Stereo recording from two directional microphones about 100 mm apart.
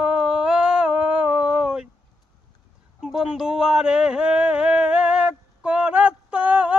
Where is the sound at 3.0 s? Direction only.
10° right (ahead or behind).